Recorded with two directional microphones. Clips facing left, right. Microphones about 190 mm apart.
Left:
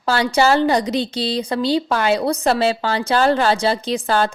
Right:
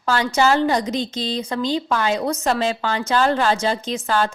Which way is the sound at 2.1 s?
35° left (ahead or behind).